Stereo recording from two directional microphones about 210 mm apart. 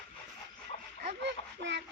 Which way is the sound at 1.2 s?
55° right (ahead or behind).